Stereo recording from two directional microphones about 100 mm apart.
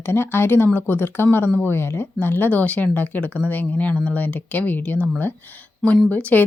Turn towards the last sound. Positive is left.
turn(degrees=15)  # may be behind; listen again after turning